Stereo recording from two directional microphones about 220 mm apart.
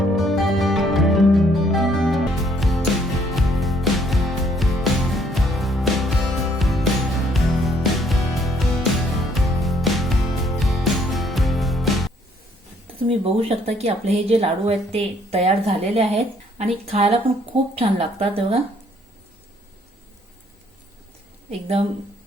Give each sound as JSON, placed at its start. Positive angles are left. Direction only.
{"t": 0.2, "sound": "music", "side_deg": 0}
{"t": 13.7, "sound": "a woman's voice", "side_deg": -30}